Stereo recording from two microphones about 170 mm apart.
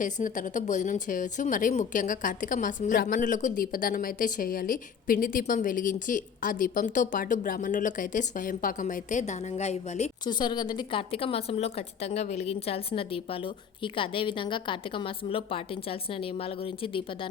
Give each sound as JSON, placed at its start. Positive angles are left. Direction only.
{"t": 0.0, "sound": "a woman's voice", "side_deg": 50}
{"t": 10.2, "sound": "speech", "side_deg": 25}